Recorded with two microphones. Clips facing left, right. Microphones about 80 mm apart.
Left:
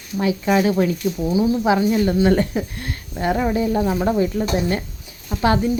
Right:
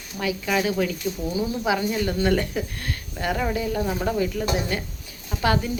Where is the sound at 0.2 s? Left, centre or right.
Left.